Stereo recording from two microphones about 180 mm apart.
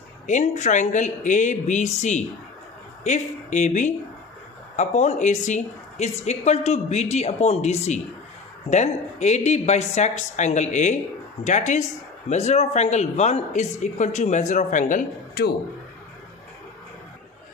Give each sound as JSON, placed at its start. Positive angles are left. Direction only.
{"t": 0.3, "sound": "speech", "side_deg": 40}